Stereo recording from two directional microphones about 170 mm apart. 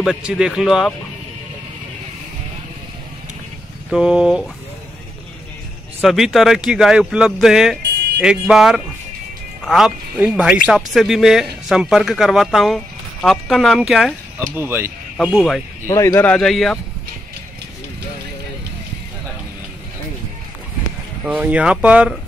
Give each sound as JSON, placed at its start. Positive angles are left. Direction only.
{"t": 0.0, "sound": "speech", "side_deg": -5}
{"t": 3.9, "sound": "speech", "side_deg": -5}
{"t": 6.0, "sound": "speech", "side_deg": 0}
{"t": 14.6, "sound": "speech", "side_deg": -15}
{"t": 15.1, "sound": "speech", "side_deg": 0}
{"t": 15.9, "sound": "speech", "side_deg": 15}
{"t": 21.3, "sound": "speech", "side_deg": -10}